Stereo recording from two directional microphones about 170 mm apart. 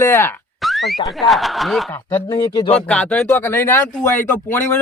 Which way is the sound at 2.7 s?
5° left (ahead or behind).